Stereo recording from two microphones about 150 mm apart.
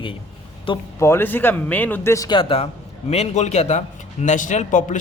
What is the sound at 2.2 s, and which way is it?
A man's voice, 35° left (ahead or behind).